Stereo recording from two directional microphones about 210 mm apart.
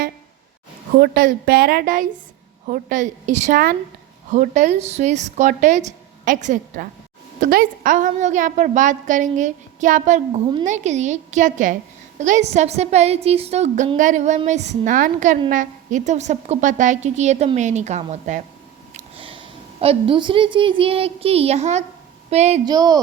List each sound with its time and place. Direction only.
0.9 s a woman's voice: 45° right (ahead or behind)
18.9 s a sound: 25° right (ahead or behind)
19.8 s a woman's voice: 25° right (ahead or behind)
22.6 s speech: 20° right (ahead or behind)